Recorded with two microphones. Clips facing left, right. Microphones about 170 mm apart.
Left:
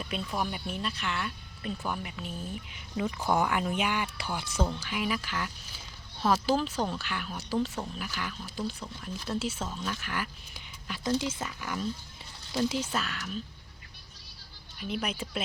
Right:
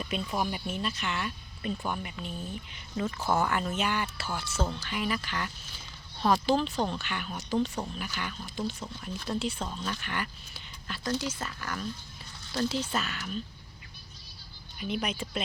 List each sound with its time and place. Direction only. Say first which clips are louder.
0.0 s speech: right 1 dB; centre (ahead or behind)
10.5 s speech: left 1 dB; 15° left (ahead or behind)
12.9 s speech: right 1 dB; centre (ahead or behind)
14.8 s speech: right 1 dB; centre (ahead or behind)